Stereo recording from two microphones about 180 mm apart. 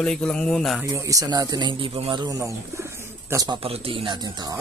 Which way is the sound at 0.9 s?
20° right (ahead or behind).